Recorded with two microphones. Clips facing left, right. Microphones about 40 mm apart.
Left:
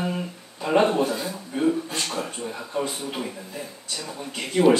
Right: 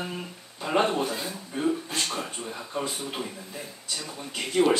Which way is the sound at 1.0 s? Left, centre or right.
Centre.